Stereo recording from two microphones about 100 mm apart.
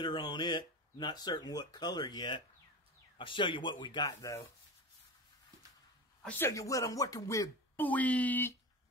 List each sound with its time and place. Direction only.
0.0 s speech: 45° left (ahead or behind)
4.2 s speech: 30° left (ahead or behind)
6.2 s speech: 20° left (ahead or behind)
6.5 s speech: 35° left (ahead or behind)
7.7 s speech: 15° left (ahead or behind)